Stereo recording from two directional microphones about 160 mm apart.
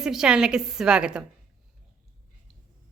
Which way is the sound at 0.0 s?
5° right (ahead or behind).